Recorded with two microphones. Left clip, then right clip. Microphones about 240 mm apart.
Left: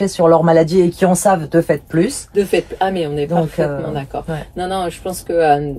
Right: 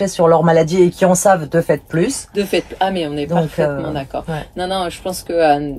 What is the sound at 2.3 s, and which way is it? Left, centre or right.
Speech, centre.